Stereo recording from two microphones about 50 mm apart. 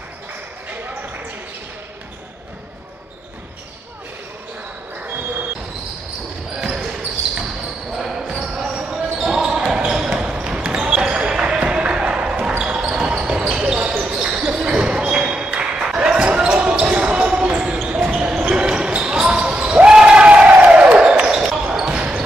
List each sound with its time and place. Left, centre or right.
0.7 s basketball bounce: right
7.9 s basketball bounce: centre